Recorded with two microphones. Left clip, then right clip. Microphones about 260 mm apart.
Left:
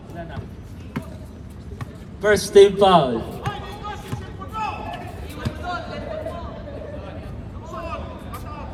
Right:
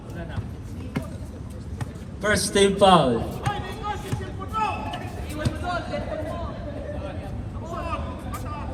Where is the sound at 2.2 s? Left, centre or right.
Left.